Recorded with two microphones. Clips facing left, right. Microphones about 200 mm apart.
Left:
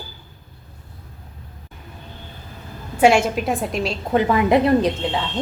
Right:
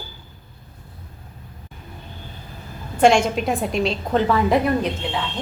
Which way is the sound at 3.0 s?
5° left (ahead or behind).